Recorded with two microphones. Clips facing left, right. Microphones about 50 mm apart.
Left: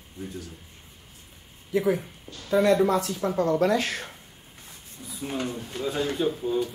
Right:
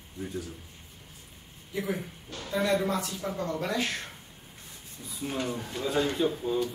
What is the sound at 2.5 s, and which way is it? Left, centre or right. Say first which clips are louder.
Speech: left 7 dB; left.